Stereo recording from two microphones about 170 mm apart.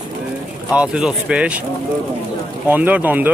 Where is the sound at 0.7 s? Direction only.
5° right (ahead or behind).